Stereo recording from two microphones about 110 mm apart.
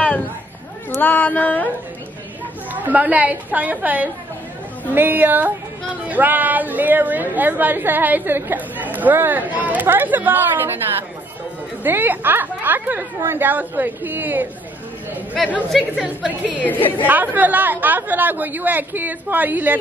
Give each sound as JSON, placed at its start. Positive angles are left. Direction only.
{"t": 0.8, "sound": "speech", "side_deg": 15}
{"t": 2.7, "sound": "a woman's voice", "side_deg": -15}
{"t": 11.8, "sound": "a woman's voice", "side_deg": -15}
{"t": 15.7, "sound": "speech", "side_deg": 0}
{"t": 16.4, "sound": "speech", "side_deg": 15}
{"t": 17.0, "sound": "a woman's voice", "side_deg": -15}